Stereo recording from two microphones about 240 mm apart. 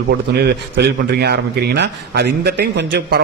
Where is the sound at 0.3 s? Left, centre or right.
Right.